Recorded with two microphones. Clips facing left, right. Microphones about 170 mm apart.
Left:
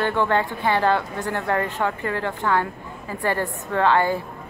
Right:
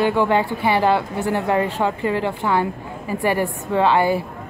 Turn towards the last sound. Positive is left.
turn(degrees=-15)  # may be behind; listen again after turning